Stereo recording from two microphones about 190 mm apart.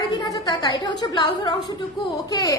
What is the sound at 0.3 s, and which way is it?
A woman's voice, 20° left (ahead or behind).